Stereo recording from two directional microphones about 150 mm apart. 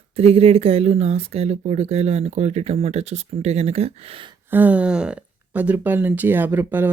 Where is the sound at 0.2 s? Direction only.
40° right (ahead or behind).